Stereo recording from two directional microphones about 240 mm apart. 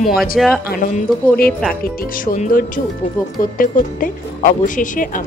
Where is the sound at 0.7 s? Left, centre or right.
Left.